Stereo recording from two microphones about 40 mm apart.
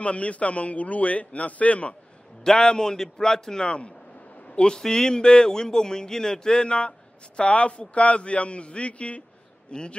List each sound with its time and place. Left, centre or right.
0.0 s a man's voice: left
2.4 s a man's voice: centre